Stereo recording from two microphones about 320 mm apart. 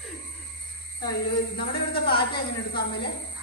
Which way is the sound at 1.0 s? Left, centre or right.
Centre.